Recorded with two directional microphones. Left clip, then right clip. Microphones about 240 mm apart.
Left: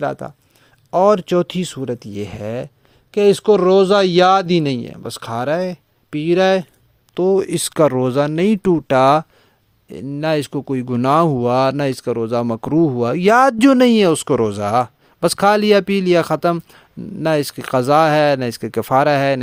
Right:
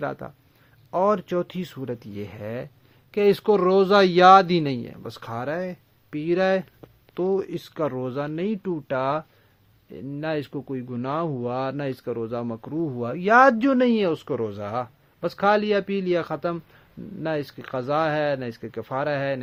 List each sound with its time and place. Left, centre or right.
0.0 s speech: left